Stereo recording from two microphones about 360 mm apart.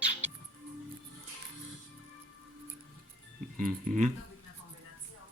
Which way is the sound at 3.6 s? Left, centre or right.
Right.